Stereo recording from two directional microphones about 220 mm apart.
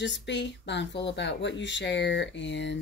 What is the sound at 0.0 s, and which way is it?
Speech, 55° left (ahead or behind).